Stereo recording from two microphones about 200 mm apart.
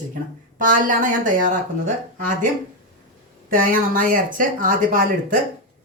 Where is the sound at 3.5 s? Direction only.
45° right (ahead or behind).